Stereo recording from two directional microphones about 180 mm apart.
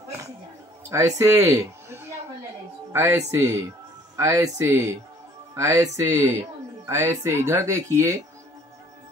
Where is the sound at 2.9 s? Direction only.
15° right (ahead or behind).